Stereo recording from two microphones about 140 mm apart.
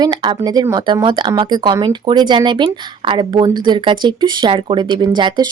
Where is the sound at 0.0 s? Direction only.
30° right (ahead or behind).